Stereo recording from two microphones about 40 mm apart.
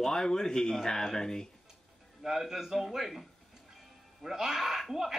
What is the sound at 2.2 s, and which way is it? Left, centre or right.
Speech, centre.